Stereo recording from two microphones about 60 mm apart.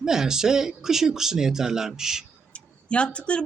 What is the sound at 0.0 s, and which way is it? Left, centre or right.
Speech, centre.